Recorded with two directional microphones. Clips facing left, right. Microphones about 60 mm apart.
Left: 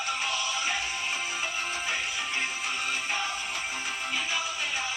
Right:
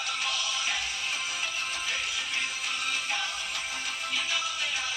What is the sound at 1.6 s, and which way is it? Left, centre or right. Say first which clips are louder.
Music: left 2 dB; left.